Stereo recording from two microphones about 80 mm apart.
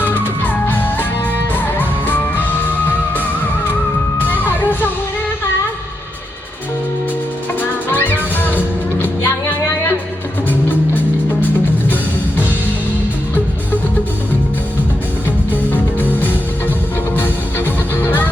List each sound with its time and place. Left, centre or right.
0.0 s music: left
4.2 s music: left
7.9 s music: left
10.5 s music: left
15.7 s music: left
18.0 s music: left